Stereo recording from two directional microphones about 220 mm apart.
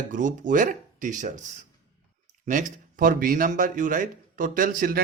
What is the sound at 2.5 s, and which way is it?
Speech, 35° right (ahead or behind).